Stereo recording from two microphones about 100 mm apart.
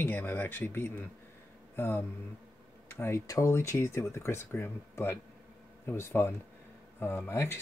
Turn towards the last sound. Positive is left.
turn(degrees=25)  # may be behind; listen again after turning